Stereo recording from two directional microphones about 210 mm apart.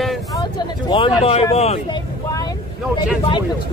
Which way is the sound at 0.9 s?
25° left (ahead or behind).